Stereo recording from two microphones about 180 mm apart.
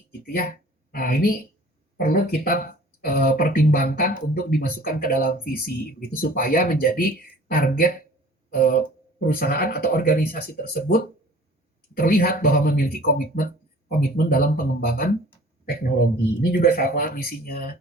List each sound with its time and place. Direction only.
0.9 s speech: 55° left (ahead or behind)
16.5 s speech: 55° left (ahead or behind)